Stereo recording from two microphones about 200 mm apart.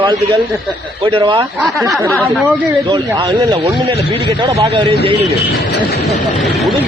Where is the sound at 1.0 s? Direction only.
25° right (ahead or behind).